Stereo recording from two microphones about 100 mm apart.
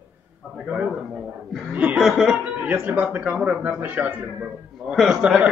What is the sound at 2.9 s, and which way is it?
Speech, 15° right (ahead or behind).